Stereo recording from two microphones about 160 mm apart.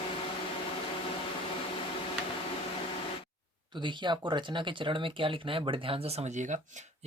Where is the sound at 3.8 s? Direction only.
30° right (ahead or behind).